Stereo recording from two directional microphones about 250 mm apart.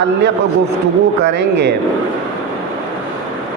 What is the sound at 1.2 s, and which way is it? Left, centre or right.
Speech, right.